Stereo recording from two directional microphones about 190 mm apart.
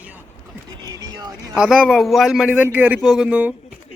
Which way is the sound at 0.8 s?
20° right (ahead or behind).